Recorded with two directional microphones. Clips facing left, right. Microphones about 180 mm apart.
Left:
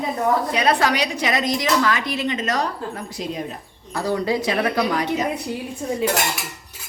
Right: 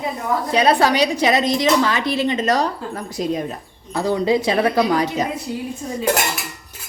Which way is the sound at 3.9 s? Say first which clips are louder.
Right 4 dB; 20° right (ahead or behind).